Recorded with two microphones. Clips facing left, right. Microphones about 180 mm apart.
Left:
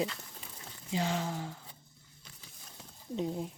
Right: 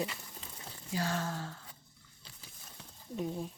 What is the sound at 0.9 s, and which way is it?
Speech, 20° left (ahead or behind).